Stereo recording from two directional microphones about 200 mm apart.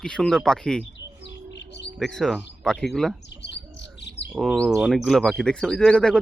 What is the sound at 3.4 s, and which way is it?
Bird, 60° left (ahead or behind).